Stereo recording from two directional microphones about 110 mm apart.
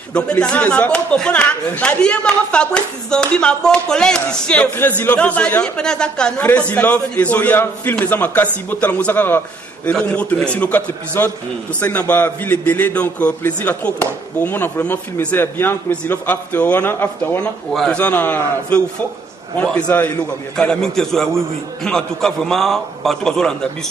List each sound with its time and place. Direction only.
0.1 s a man's voice: 10° left (ahead or behind)